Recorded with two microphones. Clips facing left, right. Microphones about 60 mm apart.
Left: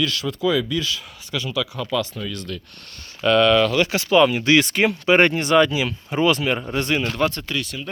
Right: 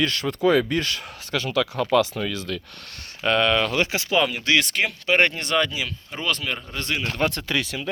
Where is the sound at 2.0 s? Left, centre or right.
Right.